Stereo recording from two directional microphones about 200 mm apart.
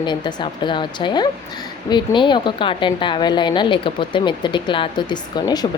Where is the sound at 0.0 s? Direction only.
20° left (ahead or behind).